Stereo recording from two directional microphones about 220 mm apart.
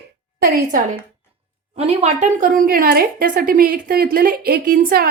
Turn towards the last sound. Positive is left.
turn(degrees=-40)  # may be behind; listen again after turning